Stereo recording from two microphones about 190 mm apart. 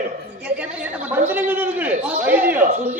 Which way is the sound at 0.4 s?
5° right (ahead or behind).